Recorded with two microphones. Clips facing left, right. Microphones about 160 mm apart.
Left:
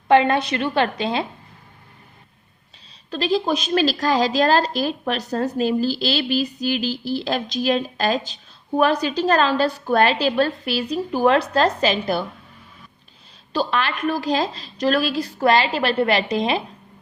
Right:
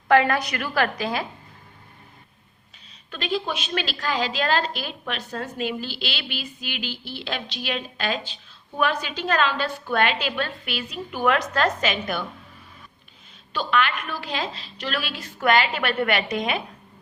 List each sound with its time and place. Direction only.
0.1 s a woman's voice: 25° left (ahead or behind)
3.1 s a woman's voice: 35° left (ahead or behind)
13.5 s a woman's voice: 35° left (ahead or behind)